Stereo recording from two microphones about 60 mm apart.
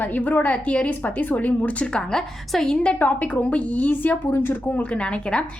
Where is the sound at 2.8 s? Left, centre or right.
Left.